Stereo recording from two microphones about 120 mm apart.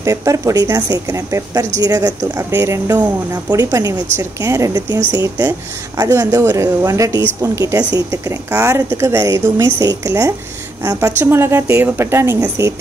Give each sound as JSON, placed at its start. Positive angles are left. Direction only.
{"t": 0.0, "sound": "a woman's voice", "side_deg": -25}